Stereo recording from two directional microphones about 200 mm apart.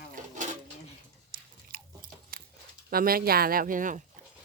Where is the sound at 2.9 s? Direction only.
45° right (ahead or behind).